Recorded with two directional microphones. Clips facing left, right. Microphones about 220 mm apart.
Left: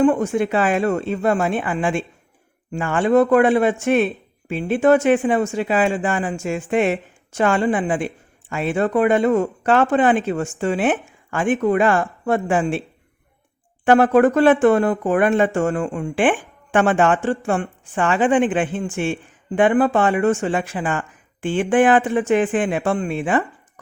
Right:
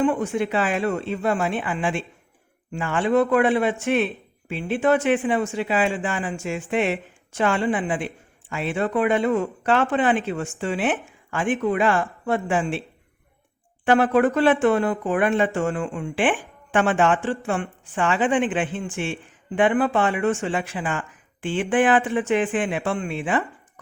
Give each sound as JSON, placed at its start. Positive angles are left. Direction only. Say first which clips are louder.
{"t": 0.0, "sound": "speech", "louder": "left 5 dB", "side_deg": 45}
{"t": 13.8, "sound": "speech", "louder": "left 4 dB", "side_deg": 45}